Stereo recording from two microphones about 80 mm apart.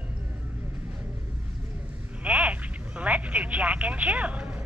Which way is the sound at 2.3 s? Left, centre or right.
Centre.